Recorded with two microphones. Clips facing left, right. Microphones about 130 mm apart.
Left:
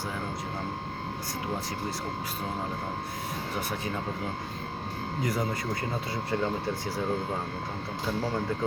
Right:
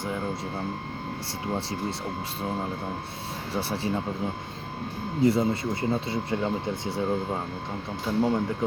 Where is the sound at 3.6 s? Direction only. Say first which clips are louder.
Right 7 dB; 30° right (ahead or behind).